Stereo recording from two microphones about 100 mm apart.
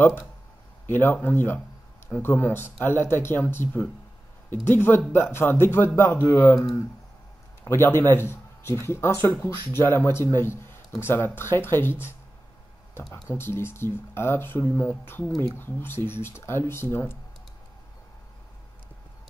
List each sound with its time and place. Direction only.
0.8 s speech: 20° left (ahead or behind)
7.6 s speech: 25° left (ahead or behind)
13.1 s speech: 25° left (ahead or behind)